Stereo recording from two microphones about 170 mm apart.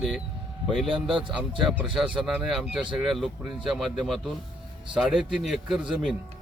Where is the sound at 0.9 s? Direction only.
30° right (ahead or behind).